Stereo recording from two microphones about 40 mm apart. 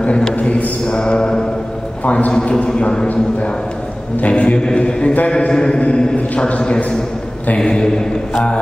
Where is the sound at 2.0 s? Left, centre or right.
Left.